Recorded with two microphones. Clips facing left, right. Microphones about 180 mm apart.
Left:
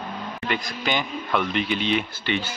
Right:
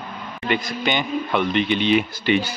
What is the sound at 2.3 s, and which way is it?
Speech, 10° right (ahead or behind).